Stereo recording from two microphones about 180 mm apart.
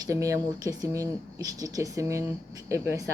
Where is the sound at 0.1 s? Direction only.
15° right (ahead or behind).